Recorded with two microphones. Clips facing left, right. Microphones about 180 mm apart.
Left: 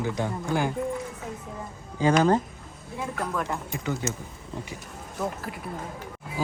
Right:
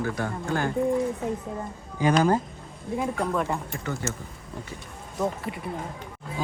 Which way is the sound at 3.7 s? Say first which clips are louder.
Left 1 dB; 15° left (ahead or behind).